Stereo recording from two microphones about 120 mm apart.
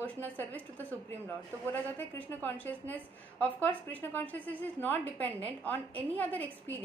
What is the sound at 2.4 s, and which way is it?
A woman's voice, 15° left (ahead or behind).